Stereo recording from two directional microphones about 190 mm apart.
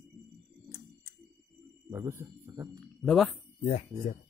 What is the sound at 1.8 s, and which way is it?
Speech, 15° right (ahead or behind).